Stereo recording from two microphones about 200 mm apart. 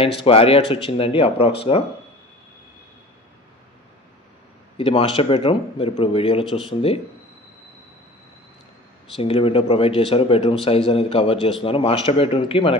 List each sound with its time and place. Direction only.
0.2 s a man's voice: 30° left (ahead or behind)
4.7 s a man's voice: 25° left (ahead or behind)
9.1 s a man's voice: 25° left (ahead or behind)